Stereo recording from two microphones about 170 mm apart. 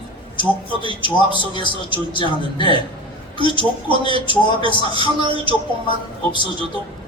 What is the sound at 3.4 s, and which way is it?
A man's voice, 30° right (ahead or behind).